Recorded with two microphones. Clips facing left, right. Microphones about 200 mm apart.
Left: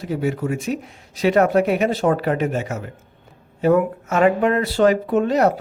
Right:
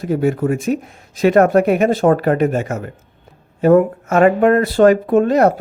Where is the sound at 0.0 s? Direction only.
50° right (ahead or behind).